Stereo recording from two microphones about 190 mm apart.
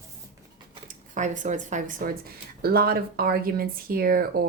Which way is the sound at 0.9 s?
40° right (ahead or behind).